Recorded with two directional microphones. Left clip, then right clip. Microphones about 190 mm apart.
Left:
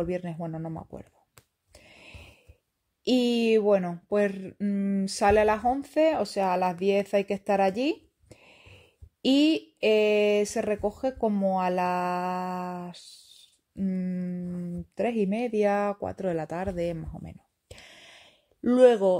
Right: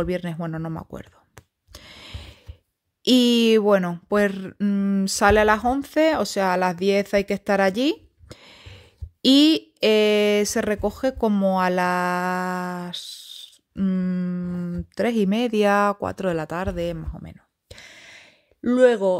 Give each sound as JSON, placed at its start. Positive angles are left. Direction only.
{"t": 0.0, "sound": "speech", "side_deg": -30}
{"t": 1.7, "sound": "a sound", "side_deg": -30}
{"t": 3.0, "sound": "speech", "side_deg": -30}